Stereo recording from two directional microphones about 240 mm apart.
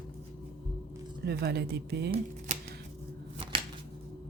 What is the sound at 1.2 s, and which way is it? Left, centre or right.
Speech, right.